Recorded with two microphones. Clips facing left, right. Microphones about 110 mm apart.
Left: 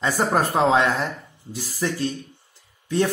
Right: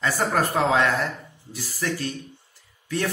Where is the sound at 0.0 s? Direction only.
20° left (ahead or behind).